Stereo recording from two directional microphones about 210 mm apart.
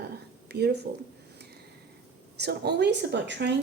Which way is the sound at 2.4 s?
50° right (ahead or behind).